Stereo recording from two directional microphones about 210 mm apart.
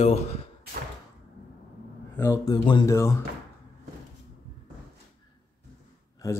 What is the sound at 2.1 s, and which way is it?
Speech, 15° left (ahead or behind).